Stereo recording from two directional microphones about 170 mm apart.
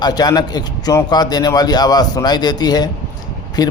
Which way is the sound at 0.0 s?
25° left (ahead or behind).